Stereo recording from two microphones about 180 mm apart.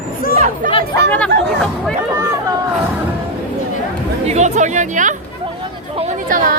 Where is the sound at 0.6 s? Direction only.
50° right (ahead or behind).